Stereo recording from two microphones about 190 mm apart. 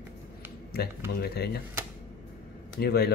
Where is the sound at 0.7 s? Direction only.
55° left (ahead or behind).